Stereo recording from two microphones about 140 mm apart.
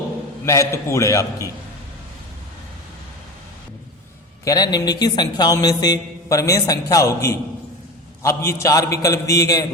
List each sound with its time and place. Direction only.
0.4 s a man's voice: 20° left (ahead or behind)
4.4 s a man's voice: 30° left (ahead or behind)